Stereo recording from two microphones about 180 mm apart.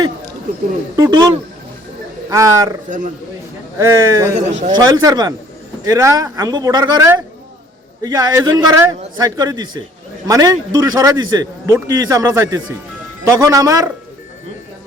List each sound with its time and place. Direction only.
0.9 s a man's voice: 20° right (ahead or behind)
2.3 s speech: 20° right (ahead or behind)
3.8 s speech: 15° right (ahead or behind)
4.4 s speech: 40° right (ahead or behind)
4.7 s a man's voice: 25° right (ahead or behind)